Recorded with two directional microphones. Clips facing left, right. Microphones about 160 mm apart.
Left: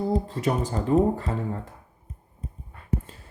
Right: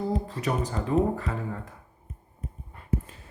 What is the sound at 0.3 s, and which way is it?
Speech, 25° left (ahead or behind).